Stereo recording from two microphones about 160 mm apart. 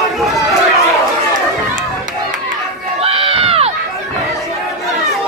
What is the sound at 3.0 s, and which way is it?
Crowd, 35° right (ahead or behind).